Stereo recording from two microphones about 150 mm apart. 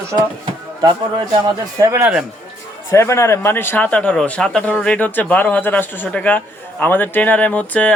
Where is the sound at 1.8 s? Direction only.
20° right (ahead or behind).